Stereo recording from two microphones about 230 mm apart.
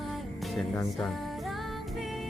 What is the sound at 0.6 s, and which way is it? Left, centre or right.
Speech, centre.